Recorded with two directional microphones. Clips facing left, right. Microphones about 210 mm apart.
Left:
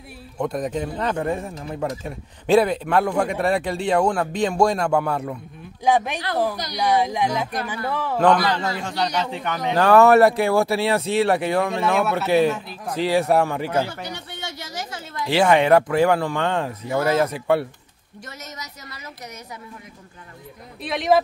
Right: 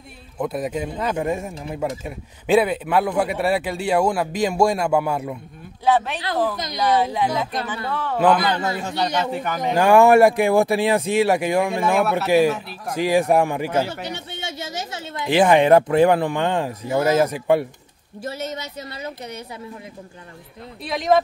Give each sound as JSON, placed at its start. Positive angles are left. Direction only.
{"t": 0.4, "sound": "a man's voice", "side_deg": -5}
{"t": 5.9, "sound": "speech", "side_deg": 15}
{"t": 8.7, "sound": "a man's voice", "side_deg": -5}
{"t": 14.1, "sound": "speech", "side_deg": -25}
{"t": 18.3, "sound": "speech", "side_deg": -30}
{"t": 20.8, "sound": "a man's voice", "side_deg": 5}